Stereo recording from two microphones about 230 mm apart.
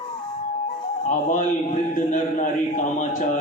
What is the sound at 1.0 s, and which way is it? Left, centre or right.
A man's voice, left.